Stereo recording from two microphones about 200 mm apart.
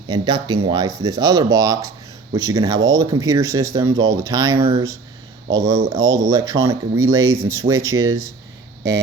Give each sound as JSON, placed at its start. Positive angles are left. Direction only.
{"t": 0.1, "sound": "speech", "side_deg": -20}